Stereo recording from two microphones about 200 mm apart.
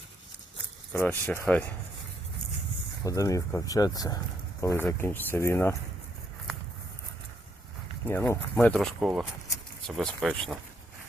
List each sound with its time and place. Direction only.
0.9 s speech: 10° left (ahead or behind)
3.0 s speech: 15° left (ahead or behind)
8.0 s speech: 10° left (ahead or behind)